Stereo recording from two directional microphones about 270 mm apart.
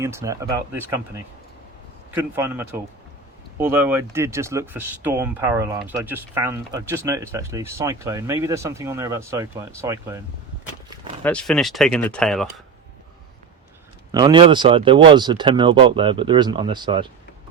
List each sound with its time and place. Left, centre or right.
0.0 s speech: centre
2.1 s speech: centre
11.2 s speech: centre
14.1 s speech: centre